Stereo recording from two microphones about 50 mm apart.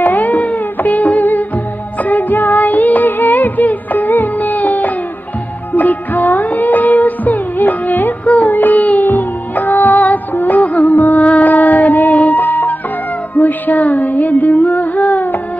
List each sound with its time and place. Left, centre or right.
0.0 s music: left